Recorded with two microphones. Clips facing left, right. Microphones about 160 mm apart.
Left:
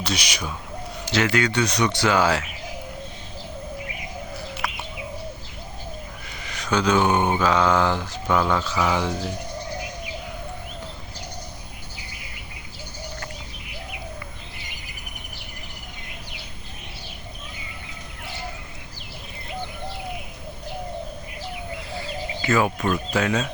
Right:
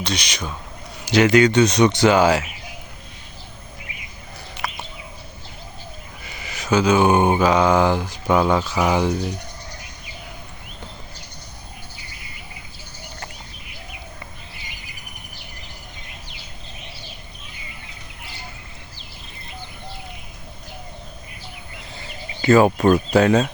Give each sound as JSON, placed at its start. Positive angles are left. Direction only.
{"t": 0.0, "sound": "speech", "side_deg": 5}
{"t": 1.0, "sound": "speech", "side_deg": -15}
{"t": 4.6, "sound": "bird", "side_deg": 0}
{"t": 6.2, "sound": "speech", "side_deg": -5}
{"t": 22.4, "sound": "speech", "side_deg": -30}